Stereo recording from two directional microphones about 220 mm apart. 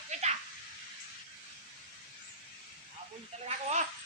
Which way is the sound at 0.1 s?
30° right (ahead or behind).